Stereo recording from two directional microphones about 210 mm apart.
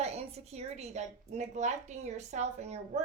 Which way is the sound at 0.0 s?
30° right (ahead or behind).